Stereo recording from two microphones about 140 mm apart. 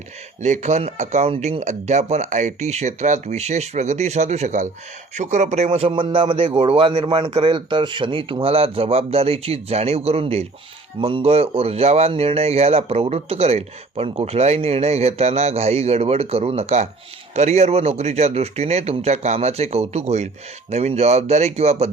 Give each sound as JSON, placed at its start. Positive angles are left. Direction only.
{"t": 0.4, "sound": "speech", "side_deg": -55}